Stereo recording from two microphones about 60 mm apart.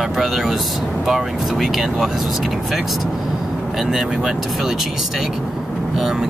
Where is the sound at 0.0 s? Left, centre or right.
Centre.